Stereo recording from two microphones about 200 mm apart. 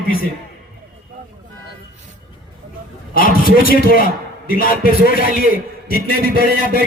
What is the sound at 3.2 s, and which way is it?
A man's voice, 45° left (ahead or behind).